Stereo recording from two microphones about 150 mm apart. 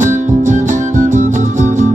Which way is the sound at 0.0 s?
60° right (ahead or behind).